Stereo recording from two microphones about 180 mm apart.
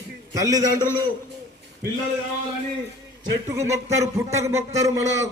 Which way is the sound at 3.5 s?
15° right (ahead or behind).